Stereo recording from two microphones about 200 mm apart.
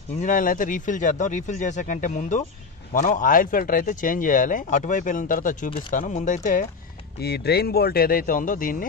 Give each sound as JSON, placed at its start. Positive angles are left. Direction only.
{"t": 0.2, "sound": "speech", "side_deg": 40}
{"t": 7.2, "sound": "speech", "side_deg": 55}